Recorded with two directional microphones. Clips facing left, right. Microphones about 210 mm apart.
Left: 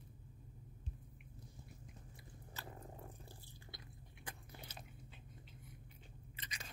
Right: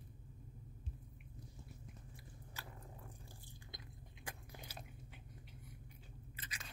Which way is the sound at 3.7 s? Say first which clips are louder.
Right 1 dB; 15° right (ahead or behind).